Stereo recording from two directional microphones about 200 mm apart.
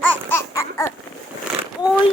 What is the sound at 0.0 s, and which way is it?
Babbling, 10° left (ahead or behind).